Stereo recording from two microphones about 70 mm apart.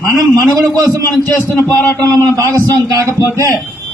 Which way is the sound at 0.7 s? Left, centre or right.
Right.